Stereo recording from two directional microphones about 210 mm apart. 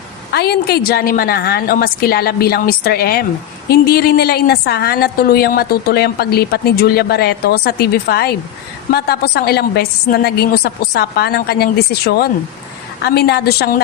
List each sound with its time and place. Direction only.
0.3 s a woman's voice: 50° left (ahead or behind)